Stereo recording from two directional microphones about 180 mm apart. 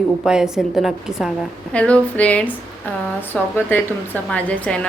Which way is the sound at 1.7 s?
5° left (ahead or behind).